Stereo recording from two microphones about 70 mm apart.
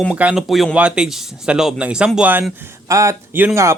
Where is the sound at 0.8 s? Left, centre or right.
Centre.